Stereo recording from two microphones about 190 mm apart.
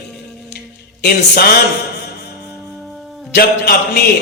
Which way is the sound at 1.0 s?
55° left (ahead or behind).